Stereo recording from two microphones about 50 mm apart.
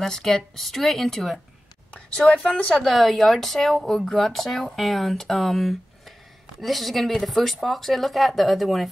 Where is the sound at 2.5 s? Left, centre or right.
Centre.